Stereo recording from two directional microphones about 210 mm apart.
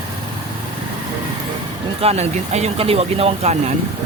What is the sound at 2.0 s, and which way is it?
Speech, 30° right (ahead or behind).